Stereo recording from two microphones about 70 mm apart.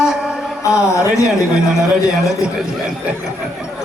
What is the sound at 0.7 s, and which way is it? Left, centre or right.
Speech, left.